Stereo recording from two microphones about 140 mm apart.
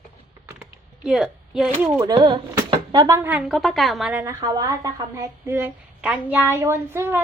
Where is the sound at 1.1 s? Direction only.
5° right (ahead or behind).